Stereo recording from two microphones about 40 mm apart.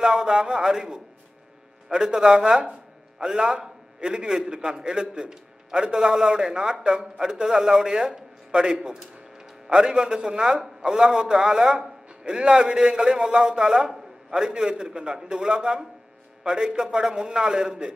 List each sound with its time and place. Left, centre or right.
0.0 s a man's voice: centre